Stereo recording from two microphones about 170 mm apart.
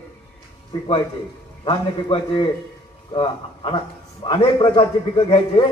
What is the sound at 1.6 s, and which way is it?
A man's voice, 30° left (ahead or behind).